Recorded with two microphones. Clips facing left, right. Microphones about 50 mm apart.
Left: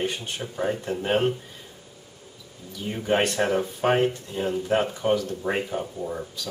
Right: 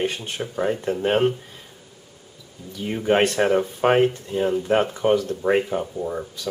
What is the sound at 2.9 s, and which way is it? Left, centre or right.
Speech, right.